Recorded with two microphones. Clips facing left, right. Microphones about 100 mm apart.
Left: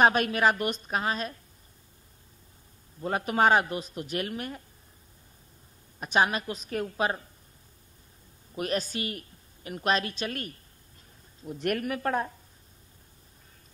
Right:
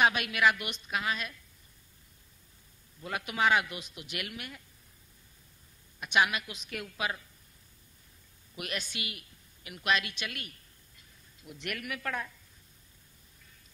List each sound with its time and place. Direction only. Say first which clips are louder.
0.0 s a man's voice: left 4 dB; 40° left (ahead or behind)
3.0 s a man's voice: left 6 dB; 35° left (ahead or behind)
5.9 s a man's voice: left 3 dB; 35° left (ahead or behind)
8.5 s a woman's voice: left 9 dB; 35° left (ahead or behind)